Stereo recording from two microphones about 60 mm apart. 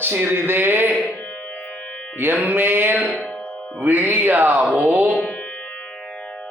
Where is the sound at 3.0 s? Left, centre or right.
Centre.